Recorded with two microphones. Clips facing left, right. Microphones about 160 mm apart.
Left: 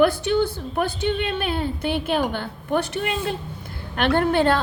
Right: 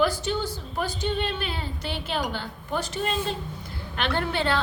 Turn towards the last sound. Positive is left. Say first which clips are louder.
# left 7 dB
turn(degrees=50)  # may be behind; listen again after turning